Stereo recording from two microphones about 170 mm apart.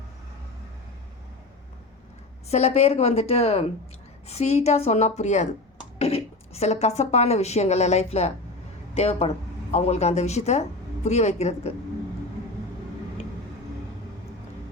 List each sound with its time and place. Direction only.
2.5 s a woman's voice: 40° left (ahead or behind)